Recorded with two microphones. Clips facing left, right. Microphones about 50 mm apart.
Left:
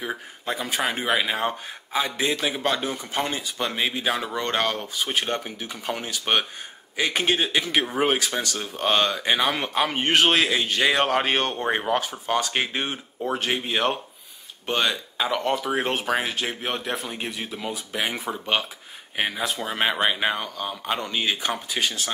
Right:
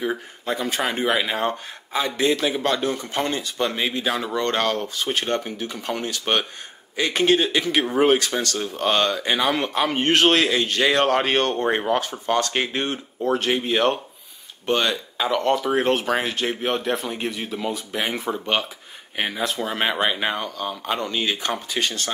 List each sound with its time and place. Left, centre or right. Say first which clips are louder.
0.0 s speech: right 4 dB; centre